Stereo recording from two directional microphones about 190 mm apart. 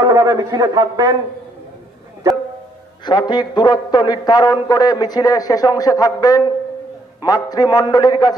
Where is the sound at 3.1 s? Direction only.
25° left (ahead or behind).